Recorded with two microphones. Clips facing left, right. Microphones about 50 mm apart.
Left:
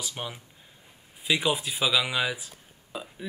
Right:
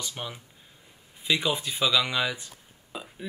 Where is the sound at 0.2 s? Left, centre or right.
Centre.